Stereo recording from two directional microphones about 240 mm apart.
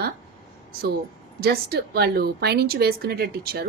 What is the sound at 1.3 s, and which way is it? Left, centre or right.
A woman's voice, right.